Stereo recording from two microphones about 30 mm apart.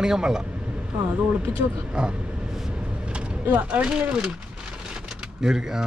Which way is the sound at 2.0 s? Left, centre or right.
Right.